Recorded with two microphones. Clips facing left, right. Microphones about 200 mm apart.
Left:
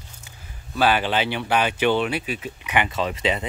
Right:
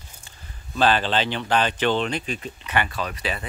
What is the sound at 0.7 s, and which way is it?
Speech, 10° left (ahead or behind).